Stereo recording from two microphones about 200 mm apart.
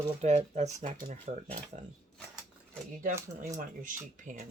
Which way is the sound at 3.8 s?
40° right (ahead or behind).